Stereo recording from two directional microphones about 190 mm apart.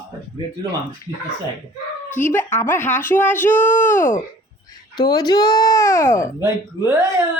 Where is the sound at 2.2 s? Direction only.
10° left (ahead or behind).